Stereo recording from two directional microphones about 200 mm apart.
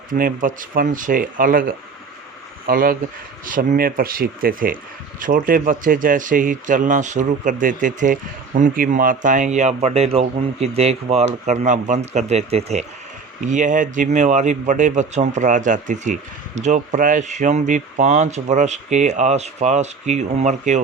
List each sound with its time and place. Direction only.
0.1 s speech: 45° right (ahead or behind)